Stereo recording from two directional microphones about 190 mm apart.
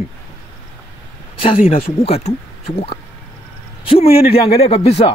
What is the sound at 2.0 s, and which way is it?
Speech, 35° left (ahead or behind).